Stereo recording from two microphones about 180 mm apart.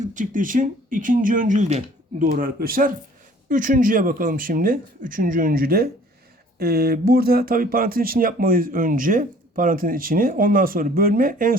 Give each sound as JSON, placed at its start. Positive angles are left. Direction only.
{"t": 0.0, "sound": "speech", "side_deg": -45}